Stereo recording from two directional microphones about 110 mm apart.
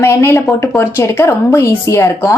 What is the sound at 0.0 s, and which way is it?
Speech, 25° left (ahead or behind).